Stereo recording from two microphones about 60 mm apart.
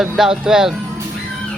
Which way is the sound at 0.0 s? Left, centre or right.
Centre.